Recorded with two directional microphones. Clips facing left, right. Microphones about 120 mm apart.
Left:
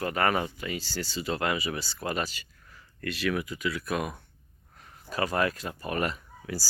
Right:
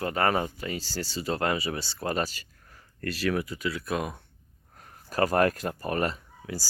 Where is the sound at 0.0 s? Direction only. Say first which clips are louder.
Right 1 dB; 30° right (ahead or behind).